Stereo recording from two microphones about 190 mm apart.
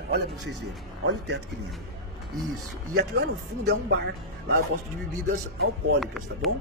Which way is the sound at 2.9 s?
60° right (ahead or behind).